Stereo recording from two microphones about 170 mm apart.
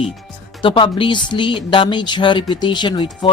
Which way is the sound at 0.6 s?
30° left (ahead or behind).